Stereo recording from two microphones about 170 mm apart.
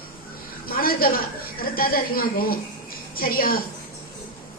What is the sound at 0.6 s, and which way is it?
A woman's voice, 60° left (ahead or behind).